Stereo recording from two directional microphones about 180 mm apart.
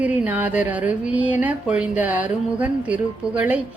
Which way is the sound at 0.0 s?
10° right (ahead or behind).